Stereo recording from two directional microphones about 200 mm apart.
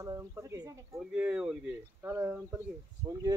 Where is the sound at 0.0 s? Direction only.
15° right (ahead or behind).